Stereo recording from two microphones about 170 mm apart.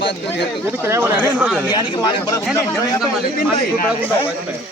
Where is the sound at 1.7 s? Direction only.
25° left (ahead or behind).